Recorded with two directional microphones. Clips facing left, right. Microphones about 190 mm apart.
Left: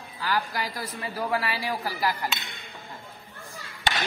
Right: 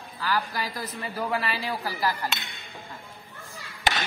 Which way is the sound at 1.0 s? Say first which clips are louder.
Left 1 dB; 10° left (ahead or behind).